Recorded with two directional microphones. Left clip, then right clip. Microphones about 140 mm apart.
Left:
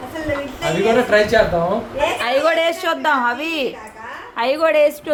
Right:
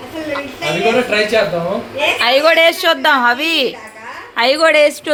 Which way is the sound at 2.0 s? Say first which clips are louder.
Right 6 dB; 10° right (ahead or behind).